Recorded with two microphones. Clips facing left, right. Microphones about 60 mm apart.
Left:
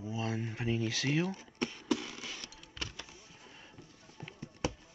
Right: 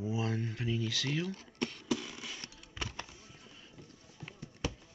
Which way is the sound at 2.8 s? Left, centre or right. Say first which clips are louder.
Right 2 dB; centre.